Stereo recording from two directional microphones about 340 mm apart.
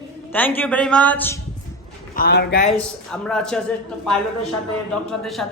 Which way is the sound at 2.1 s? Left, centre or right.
Left.